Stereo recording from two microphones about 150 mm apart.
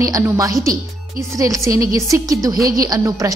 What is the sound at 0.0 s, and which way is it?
A woman's voice, 20° right (ahead or behind).